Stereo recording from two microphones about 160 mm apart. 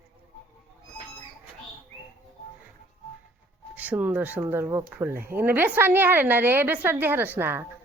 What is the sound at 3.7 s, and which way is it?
A woman's voice, 10° right (ahead or behind).